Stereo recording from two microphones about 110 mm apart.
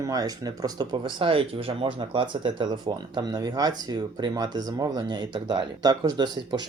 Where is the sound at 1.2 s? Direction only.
55° right (ahead or behind).